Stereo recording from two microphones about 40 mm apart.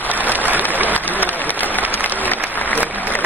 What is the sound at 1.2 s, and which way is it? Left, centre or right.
Applause, left.